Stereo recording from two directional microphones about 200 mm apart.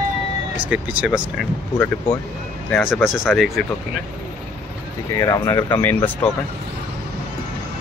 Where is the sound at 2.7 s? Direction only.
Centre (ahead or behind).